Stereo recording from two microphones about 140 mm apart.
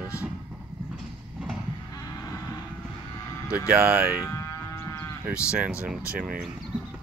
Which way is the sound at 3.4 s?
10° right (ahead or behind).